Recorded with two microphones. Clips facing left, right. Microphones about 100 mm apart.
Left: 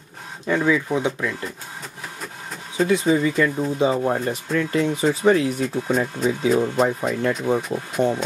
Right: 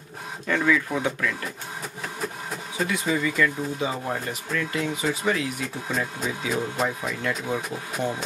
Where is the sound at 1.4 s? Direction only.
5° right (ahead or behind).